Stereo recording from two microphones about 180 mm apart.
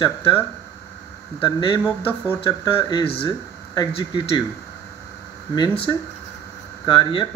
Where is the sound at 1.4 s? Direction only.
25° left (ahead or behind).